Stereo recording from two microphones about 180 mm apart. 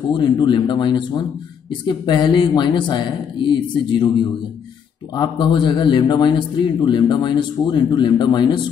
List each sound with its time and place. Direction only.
0.1 s a man's voice: 25° left (ahead or behind)
5.1 s a man's voice: 25° left (ahead or behind)